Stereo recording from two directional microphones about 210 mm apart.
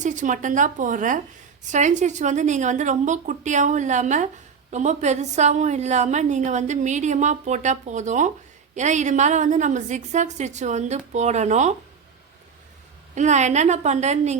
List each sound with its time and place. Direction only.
0.0 s a woman's voice: 35° right (ahead or behind)
13.1 s a woman's voice: 35° right (ahead or behind)